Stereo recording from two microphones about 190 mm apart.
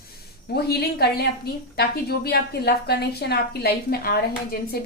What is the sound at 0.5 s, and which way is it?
A woman's voice, 55° left (ahead or behind).